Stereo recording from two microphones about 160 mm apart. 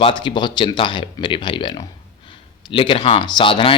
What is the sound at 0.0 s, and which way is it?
Speech, 30° left (ahead or behind).